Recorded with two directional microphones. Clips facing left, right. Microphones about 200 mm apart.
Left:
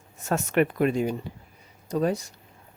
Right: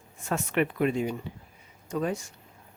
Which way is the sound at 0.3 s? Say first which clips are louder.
Left 4 dB; 45° left (ahead or behind).